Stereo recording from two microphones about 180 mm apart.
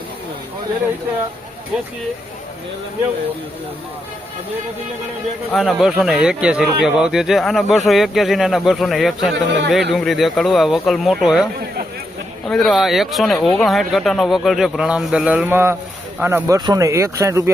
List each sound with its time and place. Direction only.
5.5 s speech: centre (ahead or behind)
9.3 s speech: 75° right (ahead or behind)
9.9 s speech: centre (ahead or behind)
12.5 s speech: centre (ahead or behind); by 17.5 s 15° right (ahead or behind)